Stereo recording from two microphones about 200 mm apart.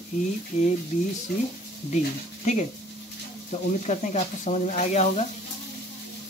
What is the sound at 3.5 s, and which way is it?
Speech, 35° left (ahead or behind).